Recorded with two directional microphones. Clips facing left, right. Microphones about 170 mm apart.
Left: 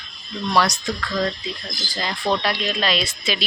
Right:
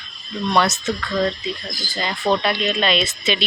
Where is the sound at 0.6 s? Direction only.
Centre (ahead or behind).